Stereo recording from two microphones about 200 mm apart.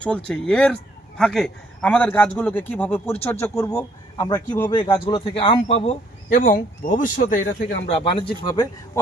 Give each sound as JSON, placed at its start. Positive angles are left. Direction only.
{"t": 0.0, "sound": "a man's voice", "side_deg": 5}
{"t": 4.7, "sound": "a man's voice", "side_deg": 25}
{"t": 8.0, "sound": "speech", "side_deg": 25}